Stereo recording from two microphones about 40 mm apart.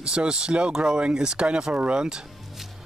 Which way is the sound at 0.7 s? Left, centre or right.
Centre.